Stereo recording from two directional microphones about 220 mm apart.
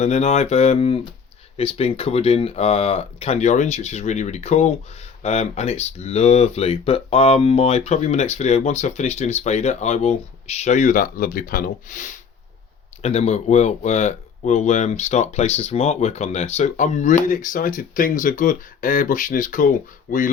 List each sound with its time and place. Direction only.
0.0 s speech: 30° left (ahead or behind)